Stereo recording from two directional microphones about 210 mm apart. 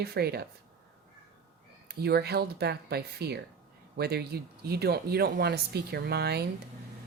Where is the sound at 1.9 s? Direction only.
50° right (ahead or behind).